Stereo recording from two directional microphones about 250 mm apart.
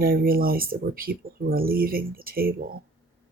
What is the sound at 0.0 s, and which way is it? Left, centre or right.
Speech, right.